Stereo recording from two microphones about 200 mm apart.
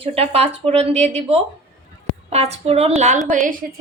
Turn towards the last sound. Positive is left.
turn(degrees=-45)  # may be behind; listen again after turning